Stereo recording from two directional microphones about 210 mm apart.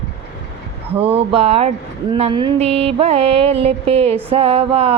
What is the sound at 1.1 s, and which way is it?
Music, 30° right (ahead or behind).